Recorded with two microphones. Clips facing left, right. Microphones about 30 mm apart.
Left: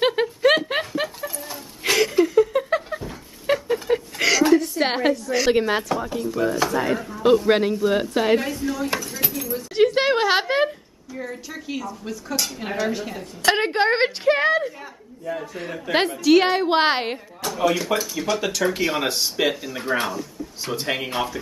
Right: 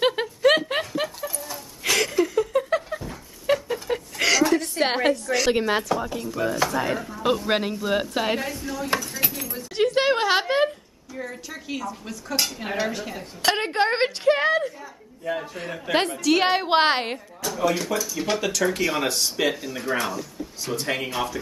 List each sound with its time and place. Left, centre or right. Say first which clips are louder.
0.0 s a sound: left 1 dB; centre
11.1 s a woman's voice: left 2 dB; centre
13.5 s a woman's voice: left 3 dB; centre
15.9 s a woman's voice: left 4 dB; centre
16.4 s a woman's voice: left 1 dB; centre
16.8 s a woman's voice: left 1 dB; centre
17.9 s speech: left 3 dB; left
18.4 s a woman's voice: even; centre